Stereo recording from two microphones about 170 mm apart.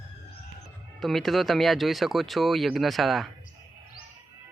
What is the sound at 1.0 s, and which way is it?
Speech, centre (ahead or behind).